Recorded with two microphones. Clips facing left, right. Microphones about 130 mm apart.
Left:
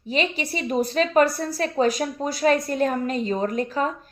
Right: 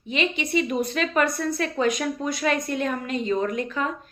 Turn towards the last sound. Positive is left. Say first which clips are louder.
# left 2 dB
turn(degrees=35)  # may be behind; listen again after turning